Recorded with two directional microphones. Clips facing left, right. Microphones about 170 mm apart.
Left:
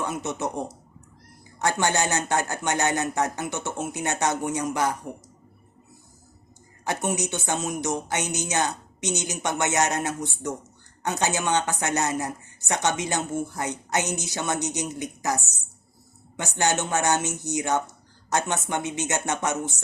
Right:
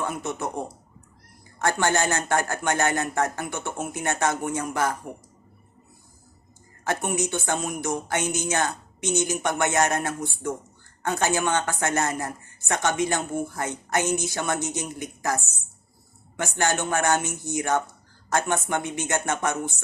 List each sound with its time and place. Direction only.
0.0 s speech: 20° left (ahead or behind)
6.8 s speech: 20° left (ahead or behind)
11.2 s speech: 20° left (ahead or behind)
16.4 s speech: 20° left (ahead or behind)